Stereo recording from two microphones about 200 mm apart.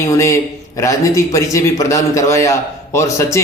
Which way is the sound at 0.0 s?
15° left (ahead or behind).